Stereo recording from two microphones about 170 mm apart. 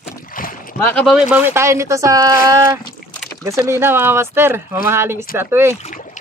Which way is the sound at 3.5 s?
15° right (ahead or behind).